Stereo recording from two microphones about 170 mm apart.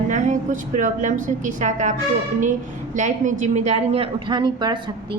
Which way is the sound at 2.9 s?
45° right (ahead or behind).